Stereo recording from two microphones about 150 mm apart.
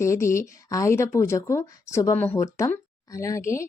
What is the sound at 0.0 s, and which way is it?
Speech, 20° left (ahead or behind).